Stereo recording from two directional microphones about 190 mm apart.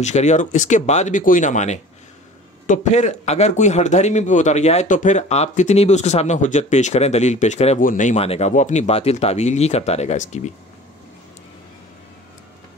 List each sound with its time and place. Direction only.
0.0 s speech: 35° left (ahead or behind)